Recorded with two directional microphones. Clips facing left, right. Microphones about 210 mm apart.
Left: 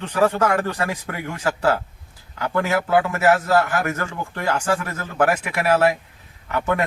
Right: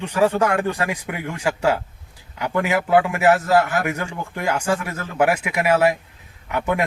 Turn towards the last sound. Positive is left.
turn(degrees=-15)  # may be behind; listen again after turning